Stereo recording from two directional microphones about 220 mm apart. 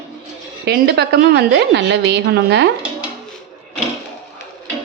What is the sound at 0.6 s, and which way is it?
A woman's voice, 50° right (ahead or behind).